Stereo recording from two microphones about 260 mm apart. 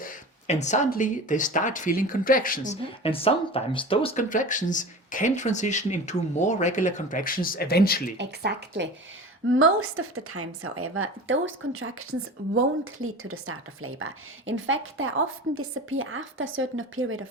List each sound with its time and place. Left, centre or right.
0.0 s speech: left
3.0 s speech: left
8.2 s speech: right
9.5 s a woman's voice: right